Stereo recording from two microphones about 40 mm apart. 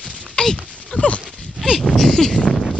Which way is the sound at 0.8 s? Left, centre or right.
Left.